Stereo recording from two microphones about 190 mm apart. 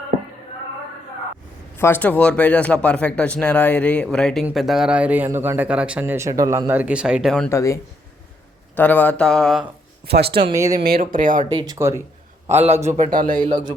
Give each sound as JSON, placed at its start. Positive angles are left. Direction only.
{"t": 1.7, "sound": "speech", "side_deg": 10}
{"t": 7.5, "sound": "speech", "side_deg": 15}
{"t": 10.1, "sound": "speech", "side_deg": -60}
{"t": 10.5, "sound": "speech", "side_deg": -15}
{"t": 10.8, "sound": "speech", "side_deg": -50}
{"t": 11.5, "sound": "speech", "side_deg": -20}
{"t": 12.5, "sound": "a man's voice", "side_deg": -35}